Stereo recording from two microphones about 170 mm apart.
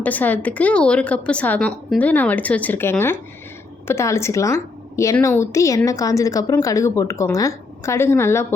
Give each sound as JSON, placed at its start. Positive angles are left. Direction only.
{"t": 0.0, "sound": "a woman's voice", "side_deg": 10}